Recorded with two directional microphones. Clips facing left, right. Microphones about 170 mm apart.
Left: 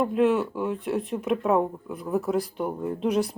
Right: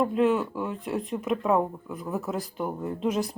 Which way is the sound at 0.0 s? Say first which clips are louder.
Left 1 dB; centre (ahead or behind).